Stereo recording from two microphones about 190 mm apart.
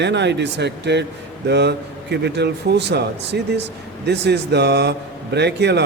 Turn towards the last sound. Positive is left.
turn(degrees=-60)  # may be behind; listen again after turning